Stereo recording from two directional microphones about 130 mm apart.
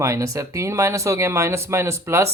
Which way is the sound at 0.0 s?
25° right (ahead or behind).